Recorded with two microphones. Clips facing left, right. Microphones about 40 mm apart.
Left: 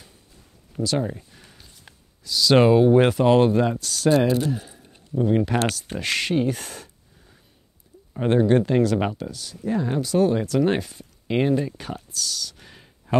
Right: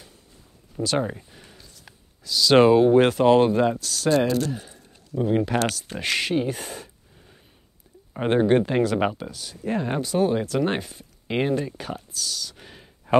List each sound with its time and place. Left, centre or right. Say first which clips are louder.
0.8 s speech: even; right
1.1 s a sound: even; centre
1.6 s a sound: right 1 dB; centre
2.2 s speech: right 1 dB; centre
8.1 s speech: left 1 dB; right
9.7 s speech: left 1 dB; right
10.0 s speech: left 2 dB; centre